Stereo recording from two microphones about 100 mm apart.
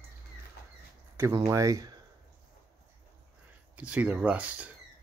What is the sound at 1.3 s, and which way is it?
Speech, 35° right (ahead or behind).